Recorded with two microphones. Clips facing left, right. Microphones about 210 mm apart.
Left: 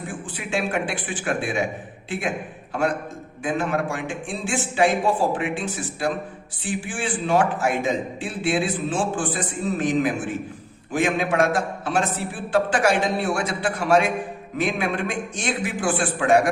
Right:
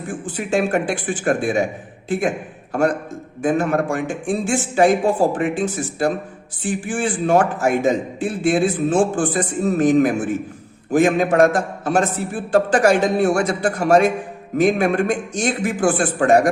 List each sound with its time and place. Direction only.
0.1 s a man's voice: 45° right (ahead or behind)
3.4 s a man's voice: 45° right (ahead or behind)